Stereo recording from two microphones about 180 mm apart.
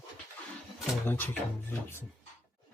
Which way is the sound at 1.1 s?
10° left (ahead or behind).